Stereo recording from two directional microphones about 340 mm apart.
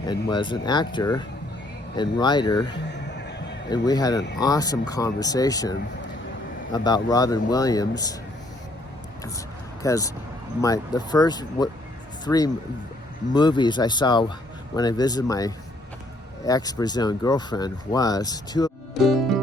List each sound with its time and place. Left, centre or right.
0.0 s speech: centre
3.1 s music: left
3.7 s speech: centre
6.7 s speech: centre
9.8 s a man's voice: centre
19.0 s music: centre